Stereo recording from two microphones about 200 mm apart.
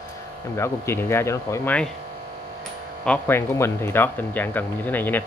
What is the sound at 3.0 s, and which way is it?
Speech, 10° left (ahead or behind).